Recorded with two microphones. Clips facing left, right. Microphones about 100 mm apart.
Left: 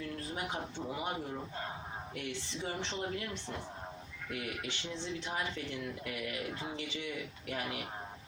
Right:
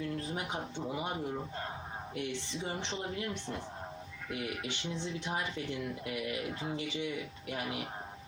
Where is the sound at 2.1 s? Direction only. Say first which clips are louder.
Right 4 dB; 20° right (ahead or behind).